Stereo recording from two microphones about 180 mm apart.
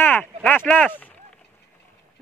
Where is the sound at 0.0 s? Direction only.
10° left (ahead or behind).